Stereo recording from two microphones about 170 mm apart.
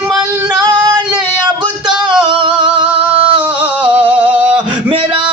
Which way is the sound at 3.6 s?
10° right (ahead or behind).